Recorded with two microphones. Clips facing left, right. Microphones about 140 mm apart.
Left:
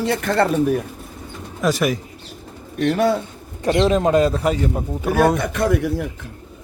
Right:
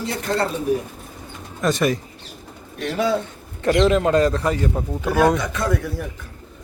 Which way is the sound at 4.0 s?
15° left (ahead or behind).